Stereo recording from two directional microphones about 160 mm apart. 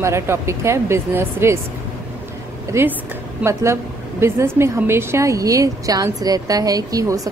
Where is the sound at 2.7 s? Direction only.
15° right (ahead or behind).